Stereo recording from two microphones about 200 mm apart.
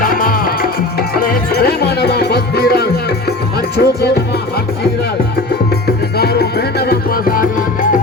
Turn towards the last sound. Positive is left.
turn(degrees=45)  # may be behind; listen again after turning